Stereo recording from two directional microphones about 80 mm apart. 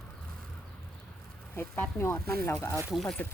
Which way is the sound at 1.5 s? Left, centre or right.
Left.